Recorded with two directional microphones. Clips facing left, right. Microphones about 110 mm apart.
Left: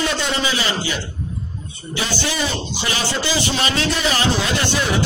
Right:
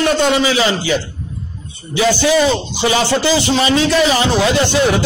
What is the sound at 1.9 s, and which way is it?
A man's voice, 90° right.